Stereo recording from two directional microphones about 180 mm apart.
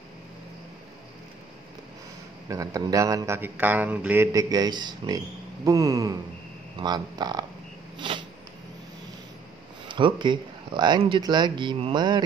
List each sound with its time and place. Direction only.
2.4 s a man's voice: 20° right (ahead or behind)
8.0 s a sound: 25° right (ahead or behind)
9.8 s a man's voice: 25° right (ahead or behind)